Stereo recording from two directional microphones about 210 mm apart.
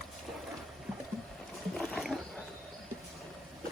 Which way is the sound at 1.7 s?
Centre (ahead or behind).